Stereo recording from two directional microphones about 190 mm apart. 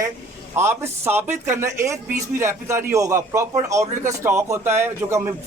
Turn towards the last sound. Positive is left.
turn(degrees=-15)  # may be behind; listen again after turning